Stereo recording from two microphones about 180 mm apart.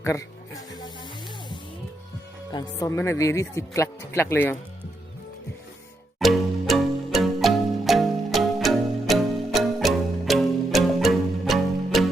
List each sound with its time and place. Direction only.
0.0 s music: 20° left (ahead or behind)
2.5 s speech: 20° left (ahead or behind)
6.1 s music: centre (ahead or behind)